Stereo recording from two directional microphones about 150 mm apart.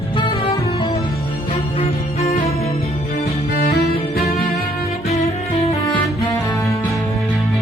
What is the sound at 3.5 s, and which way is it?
Music, 90° left.